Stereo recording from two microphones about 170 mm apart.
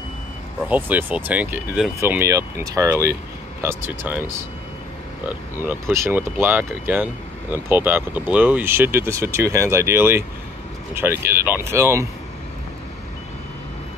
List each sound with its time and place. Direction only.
0.7 s speech: 10° right (ahead or behind)